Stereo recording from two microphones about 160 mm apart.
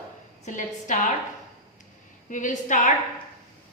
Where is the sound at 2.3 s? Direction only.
50° left (ahead or behind).